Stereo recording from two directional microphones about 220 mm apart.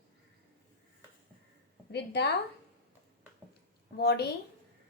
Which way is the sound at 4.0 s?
50° left (ahead or behind).